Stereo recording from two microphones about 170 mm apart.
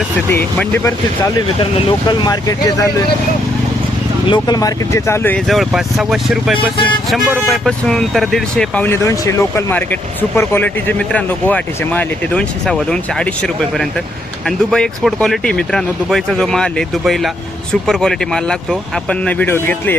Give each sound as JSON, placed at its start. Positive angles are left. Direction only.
{"t": 0.3, "sound": "speech", "side_deg": 10}
{"t": 1.5, "sound": "speech", "side_deg": 25}
{"t": 4.3, "sound": "speech", "side_deg": 25}
{"t": 5.5, "sound": "speech", "side_deg": 0}